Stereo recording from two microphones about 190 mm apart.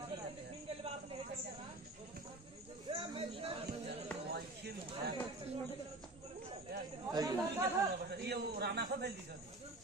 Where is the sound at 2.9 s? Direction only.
30° right (ahead or behind).